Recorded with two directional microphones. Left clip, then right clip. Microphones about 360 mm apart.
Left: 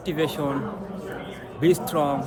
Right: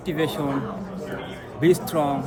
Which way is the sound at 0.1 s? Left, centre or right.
Centre.